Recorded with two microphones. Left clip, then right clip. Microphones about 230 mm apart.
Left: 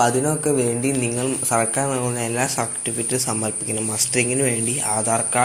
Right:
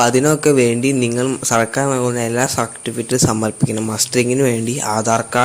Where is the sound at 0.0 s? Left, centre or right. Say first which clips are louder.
Right 6 dB; right.